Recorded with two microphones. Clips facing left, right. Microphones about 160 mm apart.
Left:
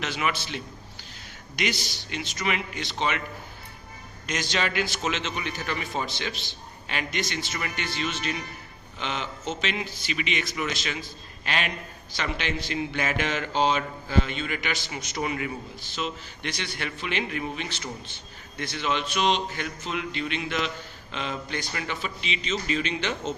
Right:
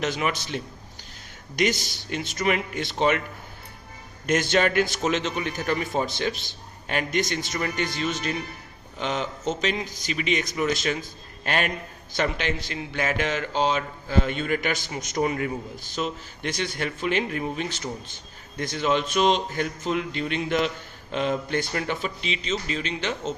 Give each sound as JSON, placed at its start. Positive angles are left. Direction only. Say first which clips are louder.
{"t": 0.0, "sound": "a man's voice", "louder": "right 3 dB", "side_deg": -40}
{"t": 4.3, "sound": "a man's voice", "louder": "right 7 dB", "side_deg": -50}
{"t": 14.3, "sound": "a man's voice", "louder": "right 5 dB", "side_deg": -45}